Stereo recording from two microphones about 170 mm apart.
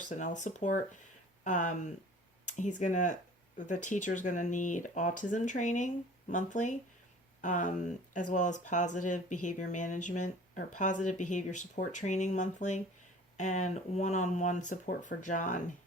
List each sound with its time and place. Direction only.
0.0 s speech: 45° left (ahead or behind)